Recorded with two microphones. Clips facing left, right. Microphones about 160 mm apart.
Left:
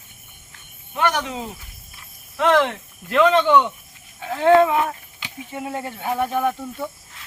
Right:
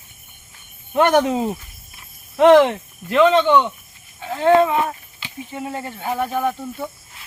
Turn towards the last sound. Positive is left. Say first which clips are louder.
# even
turn(degrees=-5)  # may be behind; listen again after turning